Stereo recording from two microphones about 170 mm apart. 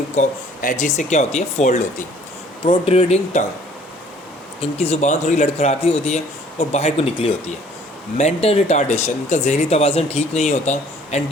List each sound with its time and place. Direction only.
0.2 s speech: 50° left (ahead or behind)
4.6 s speech: 35° left (ahead or behind)